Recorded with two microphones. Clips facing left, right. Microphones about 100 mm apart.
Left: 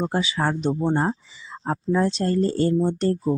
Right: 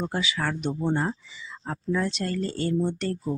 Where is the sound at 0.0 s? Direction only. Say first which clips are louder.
Left 5 dB; 30° left (ahead or behind).